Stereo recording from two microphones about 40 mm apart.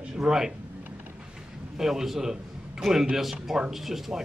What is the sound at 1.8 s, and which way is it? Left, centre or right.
Speech, centre.